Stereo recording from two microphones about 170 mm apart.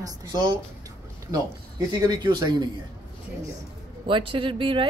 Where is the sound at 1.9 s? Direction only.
25° right (ahead or behind).